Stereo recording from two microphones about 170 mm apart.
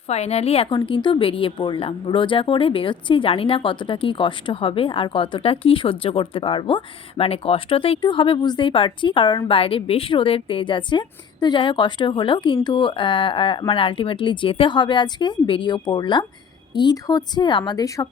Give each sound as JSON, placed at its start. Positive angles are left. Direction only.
{"t": 0.1, "sound": "a woman's voice", "side_deg": 40}